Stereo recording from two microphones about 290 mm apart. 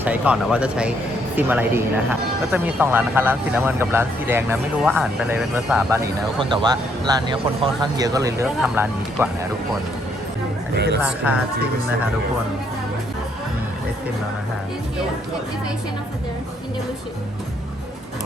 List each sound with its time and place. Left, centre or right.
0.0 s speech: centre
10.8 s speech: right